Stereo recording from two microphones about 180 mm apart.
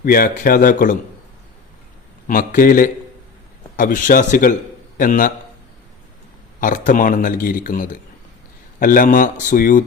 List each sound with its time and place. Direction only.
0.0 s a man's voice: 55° left (ahead or behind)
2.2 s a man's voice: 50° left (ahead or behind)
6.6 s a man's voice: 45° left (ahead or behind)